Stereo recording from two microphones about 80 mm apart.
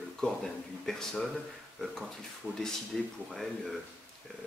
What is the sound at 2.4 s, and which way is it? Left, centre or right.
Speech, left.